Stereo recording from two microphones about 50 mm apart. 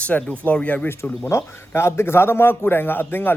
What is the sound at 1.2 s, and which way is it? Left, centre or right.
A man's voice, left.